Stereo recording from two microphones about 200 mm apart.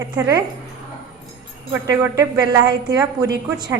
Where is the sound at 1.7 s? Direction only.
15° right (ahead or behind).